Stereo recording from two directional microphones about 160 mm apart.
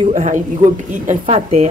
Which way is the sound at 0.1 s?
50° right (ahead or behind).